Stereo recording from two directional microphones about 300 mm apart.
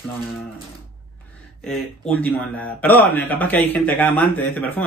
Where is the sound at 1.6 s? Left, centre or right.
Centre.